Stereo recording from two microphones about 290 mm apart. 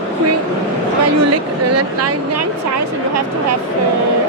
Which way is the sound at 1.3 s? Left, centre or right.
Right.